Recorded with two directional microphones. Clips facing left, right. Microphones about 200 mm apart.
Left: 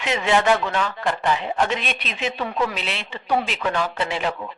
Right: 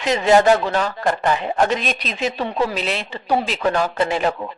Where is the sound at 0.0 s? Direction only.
35° right (ahead or behind).